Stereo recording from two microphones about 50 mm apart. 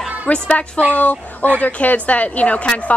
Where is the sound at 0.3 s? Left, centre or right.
Left.